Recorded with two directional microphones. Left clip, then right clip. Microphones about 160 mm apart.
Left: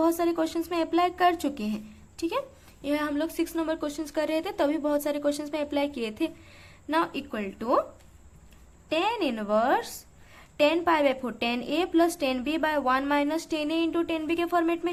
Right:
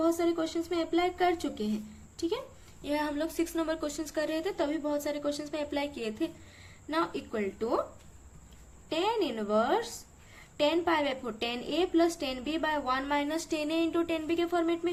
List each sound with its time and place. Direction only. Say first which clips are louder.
0.0 s a woman's voice: left 4 dB; 40° left (ahead or behind)
2.8 s a woman's voice: left 3 dB; 35° left (ahead or behind)
9.0 s a woman's voice: left 2 dB; 35° left (ahead or behind)